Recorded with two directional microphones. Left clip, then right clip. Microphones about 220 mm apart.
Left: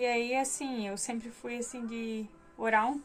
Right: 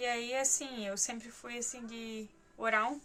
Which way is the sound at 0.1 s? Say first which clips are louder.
Left 3 dB; 10° right (ahead or behind).